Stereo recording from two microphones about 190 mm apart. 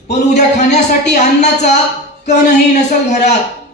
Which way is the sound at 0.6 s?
40° left (ahead or behind).